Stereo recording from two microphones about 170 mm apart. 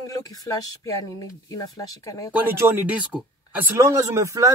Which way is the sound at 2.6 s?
10° right (ahead or behind).